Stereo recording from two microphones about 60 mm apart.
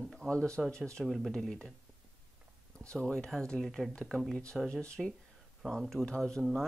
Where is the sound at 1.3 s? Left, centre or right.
Centre.